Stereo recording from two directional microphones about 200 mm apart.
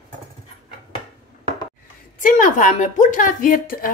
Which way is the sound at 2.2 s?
40° left (ahead or behind).